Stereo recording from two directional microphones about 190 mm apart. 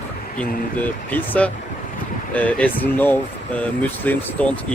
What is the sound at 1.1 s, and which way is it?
Speech, 10° left (ahead or behind).